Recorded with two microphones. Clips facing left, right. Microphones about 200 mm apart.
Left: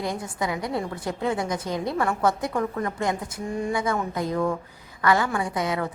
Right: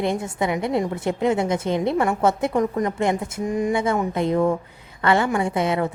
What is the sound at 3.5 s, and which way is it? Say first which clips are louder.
Speech: right 5 dB; 15° right (ahead or behind).